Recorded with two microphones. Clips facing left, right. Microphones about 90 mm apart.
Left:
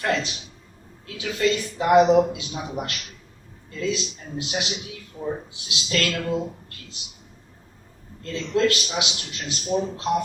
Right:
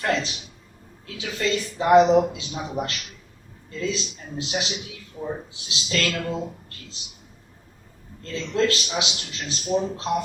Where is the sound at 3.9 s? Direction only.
30° right (ahead or behind).